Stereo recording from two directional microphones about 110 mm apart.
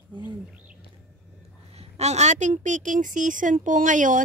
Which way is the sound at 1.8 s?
85° right.